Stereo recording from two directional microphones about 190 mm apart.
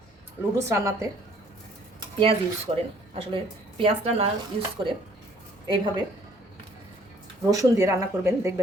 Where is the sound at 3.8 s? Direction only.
30° right (ahead or behind).